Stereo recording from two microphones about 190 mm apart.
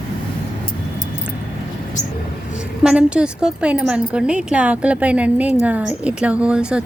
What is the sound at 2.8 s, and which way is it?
A woman's voice, 5° right (ahead or behind).